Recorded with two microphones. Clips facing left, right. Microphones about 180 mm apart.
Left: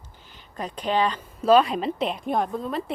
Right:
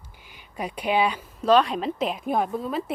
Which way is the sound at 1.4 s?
5° left (ahead or behind).